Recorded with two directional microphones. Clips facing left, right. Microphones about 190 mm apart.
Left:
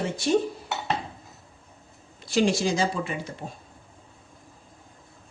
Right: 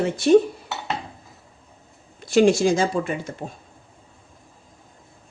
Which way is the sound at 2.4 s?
50° right (ahead or behind).